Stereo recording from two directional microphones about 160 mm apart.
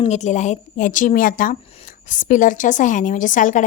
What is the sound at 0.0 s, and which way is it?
A woman's voice, 45° left (ahead or behind).